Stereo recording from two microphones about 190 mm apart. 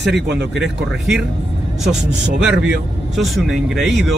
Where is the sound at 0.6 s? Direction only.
Centre (ahead or behind).